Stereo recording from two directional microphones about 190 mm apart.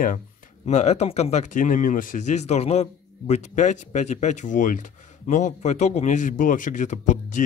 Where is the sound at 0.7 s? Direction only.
35° left (ahead or behind).